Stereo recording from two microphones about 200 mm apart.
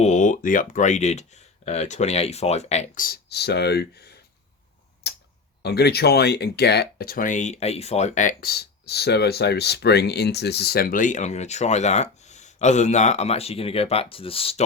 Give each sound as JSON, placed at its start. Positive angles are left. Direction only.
{"t": 0.0, "sound": "speech", "side_deg": 40}
{"t": 5.0, "sound": "tick-tock", "side_deg": 55}
{"t": 5.6, "sound": "speech", "side_deg": 55}